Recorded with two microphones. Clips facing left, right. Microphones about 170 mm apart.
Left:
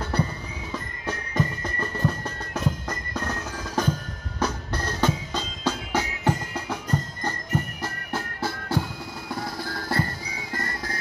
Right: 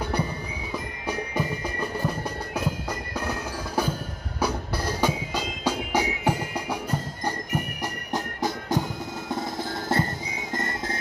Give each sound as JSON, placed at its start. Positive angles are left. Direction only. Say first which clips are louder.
{"t": 0.1, "sound": "music", "louder": "left 1 dB", "side_deg": -10}